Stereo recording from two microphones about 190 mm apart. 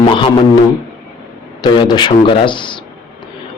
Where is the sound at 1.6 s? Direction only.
25° left (ahead or behind).